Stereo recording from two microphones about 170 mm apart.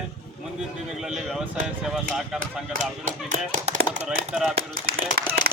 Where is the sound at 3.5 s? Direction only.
45° right (ahead or behind).